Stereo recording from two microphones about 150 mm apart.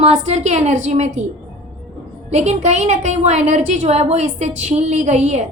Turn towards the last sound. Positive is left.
turn(degrees=-50)  # may be behind; listen again after turning